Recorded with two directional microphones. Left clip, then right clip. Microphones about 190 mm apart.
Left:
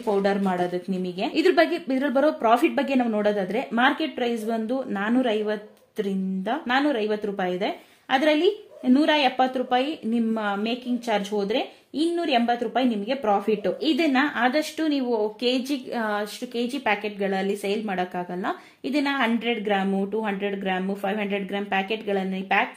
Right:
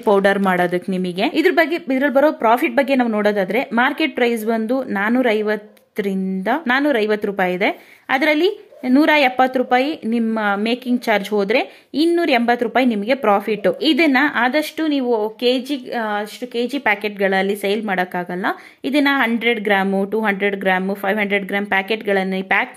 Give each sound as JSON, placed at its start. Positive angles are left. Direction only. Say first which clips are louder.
{"t": 0.1, "sound": "speech", "louder": "right 8 dB", "side_deg": -30}
{"t": 1.3, "sound": "a woman's voice", "louder": "right 3 dB", "side_deg": -15}